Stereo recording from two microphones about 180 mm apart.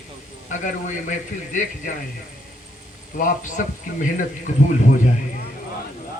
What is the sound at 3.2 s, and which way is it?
A man's voice, 50° left (ahead or behind).